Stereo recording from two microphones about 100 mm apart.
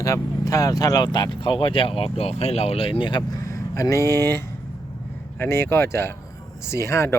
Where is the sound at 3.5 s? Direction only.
35° left (ahead or behind).